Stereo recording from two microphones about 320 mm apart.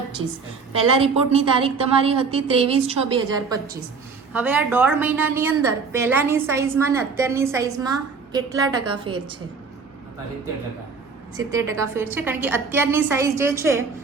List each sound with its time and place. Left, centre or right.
0.9 s a woman's voice: centre
11.3 s a woman's voice: centre